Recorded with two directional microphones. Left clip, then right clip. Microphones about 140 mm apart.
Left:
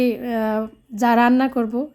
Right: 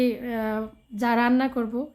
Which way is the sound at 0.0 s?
35° left (ahead or behind).